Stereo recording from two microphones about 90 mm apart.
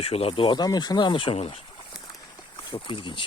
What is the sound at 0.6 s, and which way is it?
Speech, 50° left (ahead or behind).